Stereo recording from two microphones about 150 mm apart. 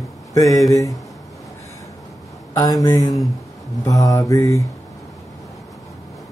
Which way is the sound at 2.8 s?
25° left (ahead or behind).